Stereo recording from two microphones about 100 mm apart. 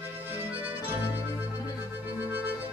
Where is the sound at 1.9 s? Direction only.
15° right (ahead or behind).